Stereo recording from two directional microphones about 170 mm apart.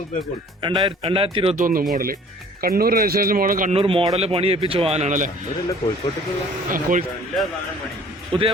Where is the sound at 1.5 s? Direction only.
55° right (ahead or behind).